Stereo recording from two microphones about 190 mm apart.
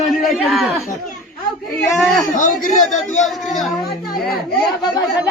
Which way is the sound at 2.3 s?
45° left (ahead or behind).